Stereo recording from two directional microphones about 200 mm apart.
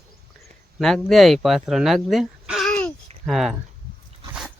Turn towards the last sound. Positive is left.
turn(degrees=0)  # may be behind; listen again after turning